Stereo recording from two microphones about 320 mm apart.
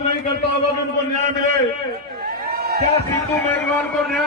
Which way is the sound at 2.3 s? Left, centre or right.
Right.